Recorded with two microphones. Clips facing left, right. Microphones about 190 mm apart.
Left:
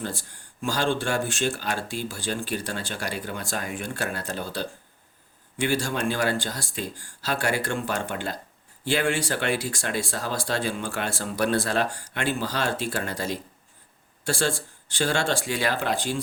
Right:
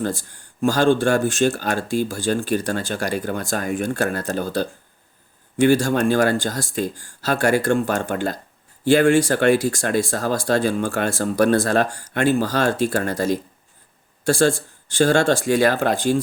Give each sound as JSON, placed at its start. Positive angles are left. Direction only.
{"t": 0.0, "sound": "speech", "side_deg": -45}